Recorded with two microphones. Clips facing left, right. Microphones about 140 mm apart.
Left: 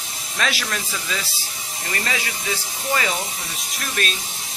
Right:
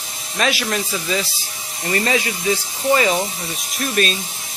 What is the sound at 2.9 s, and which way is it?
Speech, 25° right (ahead or behind).